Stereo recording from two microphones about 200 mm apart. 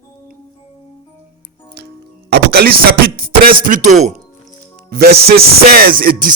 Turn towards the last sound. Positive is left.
turn(degrees=-45)  # may be behind; listen again after turning